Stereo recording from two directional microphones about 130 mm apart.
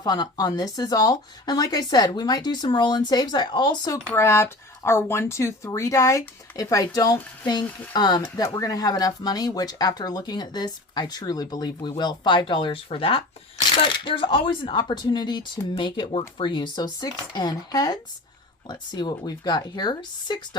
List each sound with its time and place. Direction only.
0.0 s speech: 30° left (ahead or behind)
4.1 s speech: 20° left (ahead or behind)
8.2 s speech: 20° left (ahead or behind)